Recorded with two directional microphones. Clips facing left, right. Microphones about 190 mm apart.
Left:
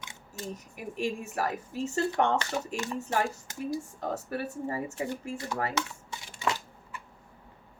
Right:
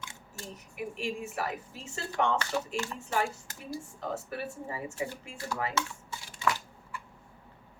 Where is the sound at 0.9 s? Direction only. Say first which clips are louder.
Left 5 dB; 40° left (ahead or behind).